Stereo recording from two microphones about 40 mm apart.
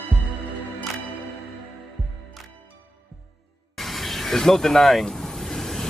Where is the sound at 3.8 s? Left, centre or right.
Centre.